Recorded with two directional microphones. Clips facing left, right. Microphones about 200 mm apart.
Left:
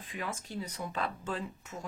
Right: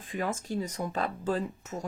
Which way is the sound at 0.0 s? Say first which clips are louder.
Right 7 dB; 45° right (ahead or behind).